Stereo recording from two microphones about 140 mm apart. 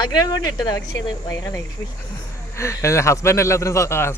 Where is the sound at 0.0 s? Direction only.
30° left (ahead or behind).